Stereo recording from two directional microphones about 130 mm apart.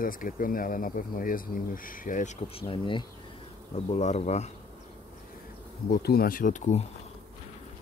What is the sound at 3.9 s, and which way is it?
Speech, 60° left (ahead or behind).